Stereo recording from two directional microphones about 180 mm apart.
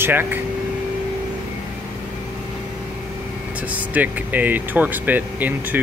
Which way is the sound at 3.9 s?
10° right (ahead or behind).